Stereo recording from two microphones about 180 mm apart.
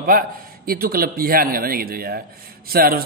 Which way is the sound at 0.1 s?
55° right (ahead or behind).